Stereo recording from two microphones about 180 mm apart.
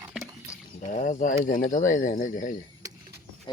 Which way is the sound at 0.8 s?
45° left (ahead or behind).